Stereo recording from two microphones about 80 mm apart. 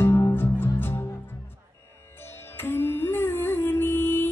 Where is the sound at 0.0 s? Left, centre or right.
Left.